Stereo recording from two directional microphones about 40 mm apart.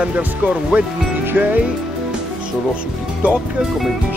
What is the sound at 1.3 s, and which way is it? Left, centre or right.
Music, right.